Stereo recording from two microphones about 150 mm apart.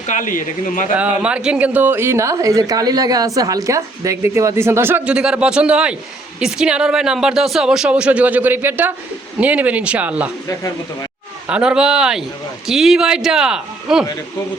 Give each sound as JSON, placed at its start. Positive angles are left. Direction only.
{"t": 0.1, "sound": "speech", "side_deg": 60}
{"t": 0.9, "sound": "a woman's voice", "side_deg": -10}
{"t": 11.4, "sound": "speech", "side_deg": -5}